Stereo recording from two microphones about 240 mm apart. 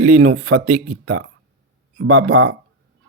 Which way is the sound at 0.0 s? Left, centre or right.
Right.